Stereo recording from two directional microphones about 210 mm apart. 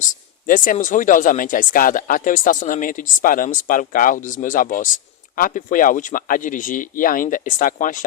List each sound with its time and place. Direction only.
0.4 s speech: 40° left (ahead or behind)